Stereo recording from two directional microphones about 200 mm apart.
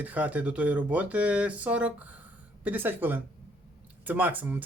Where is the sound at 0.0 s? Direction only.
10° right (ahead or behind).